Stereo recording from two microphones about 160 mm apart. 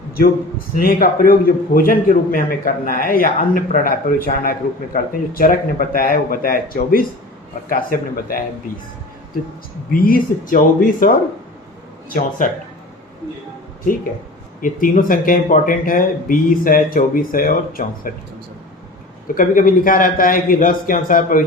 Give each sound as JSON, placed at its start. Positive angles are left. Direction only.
{"t": 0.8, "sound": "a man's voice", "side_deg": 65}
{"t": 9.9, "sound": "a man's voice", "side_deg": 60}
{"t": 14.6, "sound": "a man's voice", "side_deg": 60}
{"t": 19.3, "sound": "a man's voice", "side_deg": 55}